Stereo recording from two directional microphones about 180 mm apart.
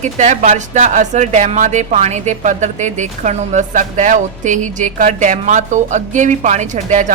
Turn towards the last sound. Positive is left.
turn(degrees=-40)  # may be behind; listen again after turning